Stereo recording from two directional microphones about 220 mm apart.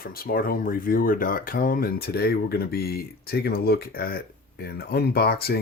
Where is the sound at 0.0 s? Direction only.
40° left (ahead or behind).